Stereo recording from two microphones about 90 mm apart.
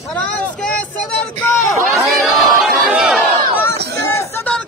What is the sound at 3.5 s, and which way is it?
Speech, 30° left (ahead or behind).